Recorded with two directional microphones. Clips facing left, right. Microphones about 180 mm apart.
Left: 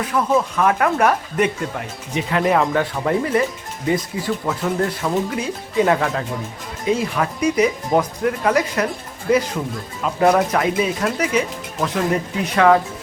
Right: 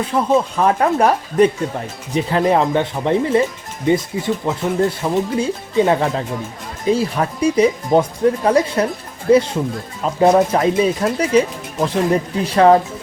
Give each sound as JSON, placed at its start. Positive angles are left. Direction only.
{"t": 0.0, "sound": "speech", "side_deg": -25}